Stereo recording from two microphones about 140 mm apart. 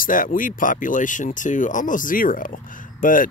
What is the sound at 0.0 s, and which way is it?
Speech, 75° left (ahead or behind).